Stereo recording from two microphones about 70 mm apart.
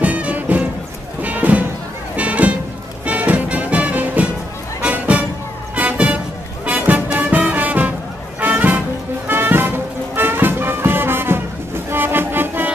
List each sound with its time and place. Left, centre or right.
0.0 s music: centre